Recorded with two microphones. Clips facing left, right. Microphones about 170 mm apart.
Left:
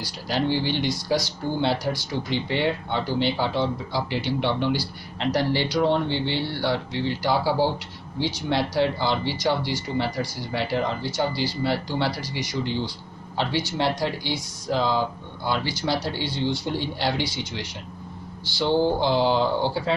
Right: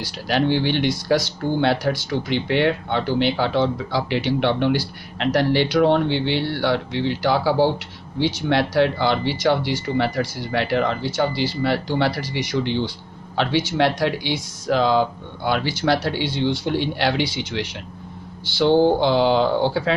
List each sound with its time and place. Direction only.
0.3 s speech: 65° right (ahead or behind)